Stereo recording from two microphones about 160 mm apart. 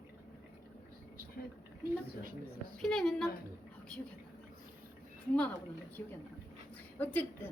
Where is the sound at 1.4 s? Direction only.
75° left (ahead or behind).